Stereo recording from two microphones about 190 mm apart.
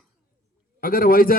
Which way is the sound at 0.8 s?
50° left (ahead or behind).